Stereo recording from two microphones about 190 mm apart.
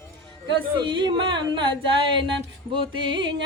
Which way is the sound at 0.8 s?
25° right (ahead or behind).